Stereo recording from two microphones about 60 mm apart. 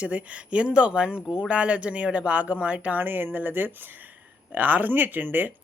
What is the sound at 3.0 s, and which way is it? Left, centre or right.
Speech, right.